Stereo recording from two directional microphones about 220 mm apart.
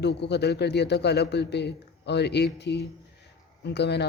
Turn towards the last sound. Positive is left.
turn(degrees=50)  # may be behind; listen again after turning